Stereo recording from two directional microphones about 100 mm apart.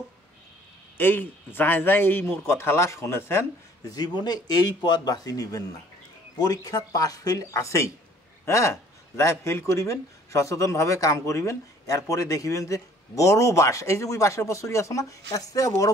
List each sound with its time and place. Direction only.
0.9 s a man's voice: 20° left (ahead or behind)
3.9 s speech: 45° left (ahead or behind)